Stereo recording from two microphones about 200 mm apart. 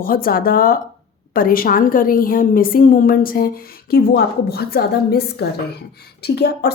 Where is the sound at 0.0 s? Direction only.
45° left (ahead or behind).